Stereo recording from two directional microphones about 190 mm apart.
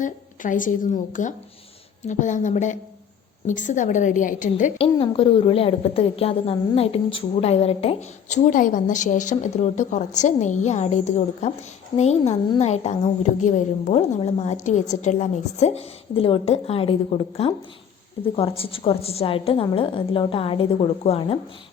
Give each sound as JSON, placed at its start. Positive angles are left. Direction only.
{"t": 0.0, "sound": "a woman's voice", "side_deg": 45}
{"t": 4.8, "sound": "a woman's voice", "side_deg": 30}